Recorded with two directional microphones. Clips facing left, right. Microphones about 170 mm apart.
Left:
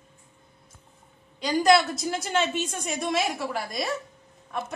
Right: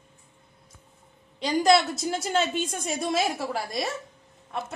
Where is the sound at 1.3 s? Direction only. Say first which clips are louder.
Even; 25° right (ahead or behind).